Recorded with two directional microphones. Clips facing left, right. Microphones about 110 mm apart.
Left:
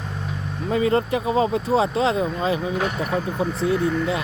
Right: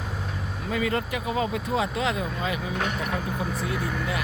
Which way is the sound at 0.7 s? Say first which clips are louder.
Left 7 dB; 30° left (ahead or behind).